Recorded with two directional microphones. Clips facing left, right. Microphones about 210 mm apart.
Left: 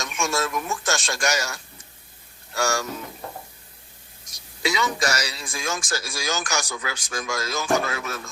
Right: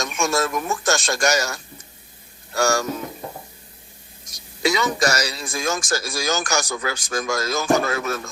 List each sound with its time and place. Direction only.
0.0 s speech: 40° right (ahead or behind)
2.6 s speech: 40° right (ahead or behind)
4.3 s speech: 45° right (ahead or behind)